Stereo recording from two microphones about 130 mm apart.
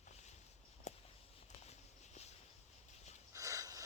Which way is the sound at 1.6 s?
60° left (ahead or behind).